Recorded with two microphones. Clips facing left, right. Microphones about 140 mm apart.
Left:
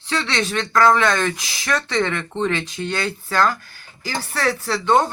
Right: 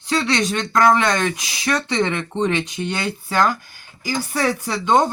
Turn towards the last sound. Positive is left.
turn(degrees=-15)  # may be behind; listen again after turning